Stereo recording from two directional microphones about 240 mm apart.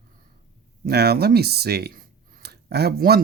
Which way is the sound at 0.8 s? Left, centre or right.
Right.